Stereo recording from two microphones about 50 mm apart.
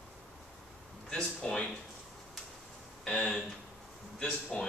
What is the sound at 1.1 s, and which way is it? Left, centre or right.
Speech, left.